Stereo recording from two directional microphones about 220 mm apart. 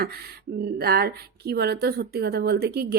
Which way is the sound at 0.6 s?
45° right (ahead or behind).